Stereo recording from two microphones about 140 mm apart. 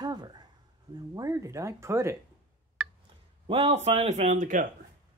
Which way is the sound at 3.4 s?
45° right (ahead or behind).